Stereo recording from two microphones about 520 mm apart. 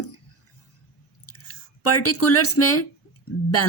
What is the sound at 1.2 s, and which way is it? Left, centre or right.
A woman's voice, left.